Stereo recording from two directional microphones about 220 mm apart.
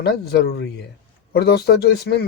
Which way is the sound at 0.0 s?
45° left (ahead or behind).